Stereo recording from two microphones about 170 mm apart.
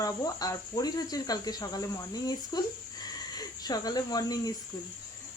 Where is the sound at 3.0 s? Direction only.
20° left (ahead or behind).